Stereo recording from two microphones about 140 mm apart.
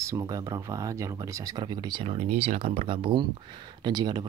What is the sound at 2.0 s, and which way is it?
Speech, 50° right (ahead or behind).